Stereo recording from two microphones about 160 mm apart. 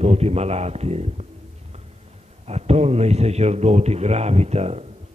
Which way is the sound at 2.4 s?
40° right (ahead or behind).